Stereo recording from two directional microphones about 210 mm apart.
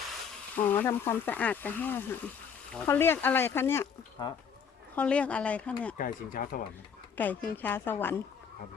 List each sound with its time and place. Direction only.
0.5 s speech: 10° left (ahead or behind)
4.9 s speech: 5° left (ahead or behind)
6.0 s speech: 40° left (ahead or behind)
7.2 s speech: 10° left (ahead or behind)